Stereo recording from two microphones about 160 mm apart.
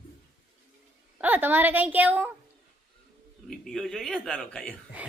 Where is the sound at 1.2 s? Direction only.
10° right (ahead or behind).